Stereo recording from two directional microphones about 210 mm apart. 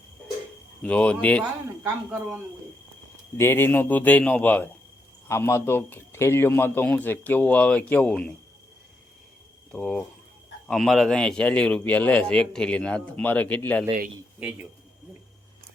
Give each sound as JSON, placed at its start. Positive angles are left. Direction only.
{"t": 0.8, "sound": "a man's voice", "side_deg": 5}
{"t": 3.3, "sound": "a man's voice", "side_deg": 10}
{"t": 9.7, "sound": "a man's voice", "side_deg": 0}
{"t": 14.3, "sound": "speech", "side_deg": -5}